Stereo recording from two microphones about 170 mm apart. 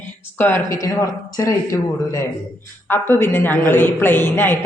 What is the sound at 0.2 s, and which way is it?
Speech, 10° left (ahead or behind).